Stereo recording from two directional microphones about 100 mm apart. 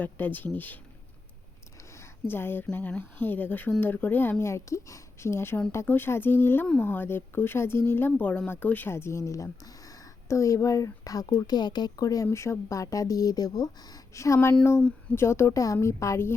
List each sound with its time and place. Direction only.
0.0 s speech: 20° left (ahead or behind)
2.0 s a sound: 20° left (ahead or behind)
2.7 s speech: 20° left (ahead or behind)